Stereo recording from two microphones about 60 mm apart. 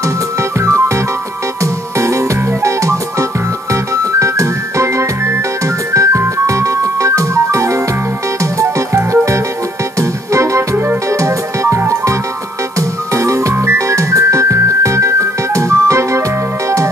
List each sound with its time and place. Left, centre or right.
0.0 s music: right